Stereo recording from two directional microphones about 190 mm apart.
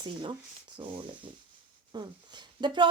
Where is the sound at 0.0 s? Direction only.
25° right (ahead or behind).